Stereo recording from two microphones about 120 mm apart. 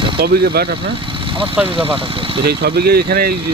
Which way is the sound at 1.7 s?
50° right (ahead or behind).